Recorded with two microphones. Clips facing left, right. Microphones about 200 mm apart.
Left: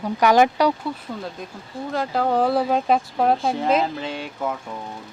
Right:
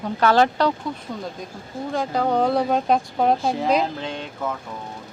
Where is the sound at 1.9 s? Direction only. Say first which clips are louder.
Even; centre (ahead or behind).